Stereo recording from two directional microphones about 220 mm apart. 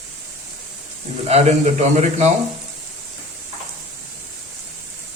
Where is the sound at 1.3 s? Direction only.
30° right (ahead or behind).